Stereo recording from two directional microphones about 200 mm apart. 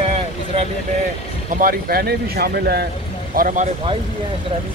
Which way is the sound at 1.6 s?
45° right (ahead or behind).